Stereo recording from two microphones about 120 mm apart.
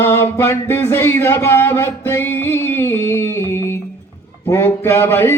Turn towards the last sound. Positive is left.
turn(degrees=20)  # may be behind; listen again after turning